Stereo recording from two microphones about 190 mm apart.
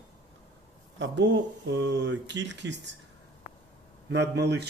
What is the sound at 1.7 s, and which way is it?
Speech, 65° right (ahead or behind).